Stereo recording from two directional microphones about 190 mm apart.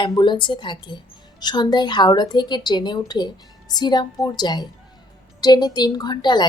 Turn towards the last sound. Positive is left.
turn(degrees=20)  # may be behind; listen again after turning